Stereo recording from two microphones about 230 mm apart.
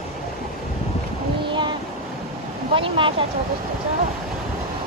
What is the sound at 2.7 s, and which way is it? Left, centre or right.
Speech, right.